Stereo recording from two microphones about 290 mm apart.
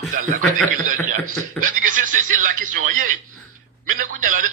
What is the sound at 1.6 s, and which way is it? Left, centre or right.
Speech, right.